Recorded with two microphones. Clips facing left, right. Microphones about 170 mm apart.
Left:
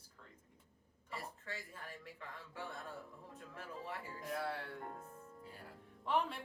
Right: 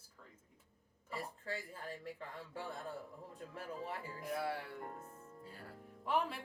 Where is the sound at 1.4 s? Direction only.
35° right (ahead or behind).